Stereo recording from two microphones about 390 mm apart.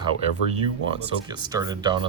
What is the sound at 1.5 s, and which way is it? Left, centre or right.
Speech, centre.